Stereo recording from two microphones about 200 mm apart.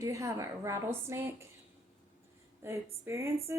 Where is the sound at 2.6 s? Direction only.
15° right (ahead or behind).